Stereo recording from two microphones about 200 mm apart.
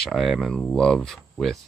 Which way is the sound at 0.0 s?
Centre (ahead or behind).